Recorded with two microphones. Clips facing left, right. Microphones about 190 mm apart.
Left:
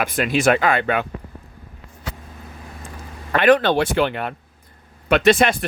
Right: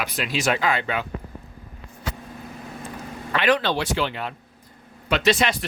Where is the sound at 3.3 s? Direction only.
50° left (ahead or behind).